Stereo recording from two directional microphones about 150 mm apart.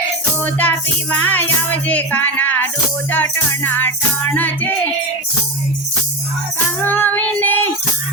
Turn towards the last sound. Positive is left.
turn(degrees=10)  # may be behind; listen again after turning